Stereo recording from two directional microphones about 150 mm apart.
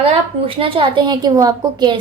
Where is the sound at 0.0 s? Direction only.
35° right (ahead or behind).